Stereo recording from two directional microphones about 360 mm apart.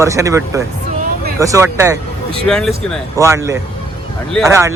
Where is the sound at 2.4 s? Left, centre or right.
Centre.